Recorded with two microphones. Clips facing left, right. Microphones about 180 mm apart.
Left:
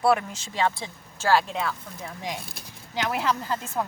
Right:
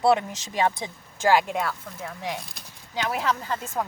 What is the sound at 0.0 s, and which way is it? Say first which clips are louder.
A woman's voice: right 1 dB; 20° right (ahead or behind).